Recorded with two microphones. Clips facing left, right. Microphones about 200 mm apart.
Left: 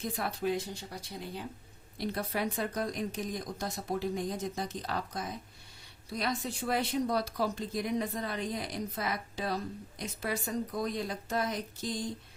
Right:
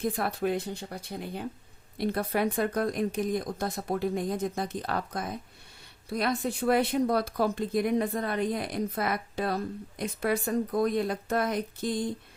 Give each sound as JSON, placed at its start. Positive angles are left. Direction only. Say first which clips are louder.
{"t": 0.0, "sound": "speech", "louder": "right 5 dB", "side_deg": -55}